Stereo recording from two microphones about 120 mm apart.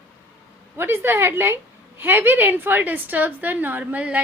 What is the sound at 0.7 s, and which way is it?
A woman's voice, 20° right (ahead or behind).